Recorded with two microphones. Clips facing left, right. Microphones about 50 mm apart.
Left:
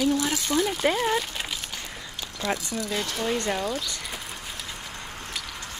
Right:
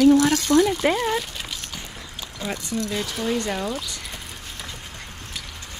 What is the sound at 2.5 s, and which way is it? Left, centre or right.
Speech, centre.